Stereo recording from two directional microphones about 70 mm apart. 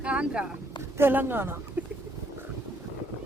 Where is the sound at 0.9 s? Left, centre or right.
Right.